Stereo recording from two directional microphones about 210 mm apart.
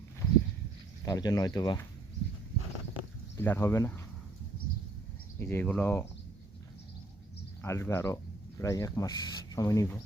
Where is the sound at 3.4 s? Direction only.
10° left (ahead or behind).